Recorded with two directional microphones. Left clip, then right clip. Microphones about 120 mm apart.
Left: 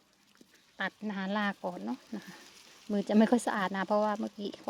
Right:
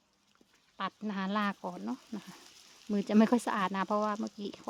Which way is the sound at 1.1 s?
15° right (ahead or behind).